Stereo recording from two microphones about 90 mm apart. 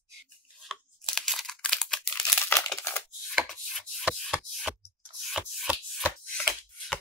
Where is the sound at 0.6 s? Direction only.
Centre (ahead or behind).